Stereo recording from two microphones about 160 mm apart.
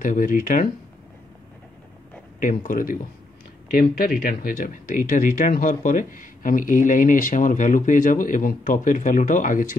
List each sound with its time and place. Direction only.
0.0 s speech: 60° left (ahead or behind)
2.4 s speech: 55° left (ahead or behind)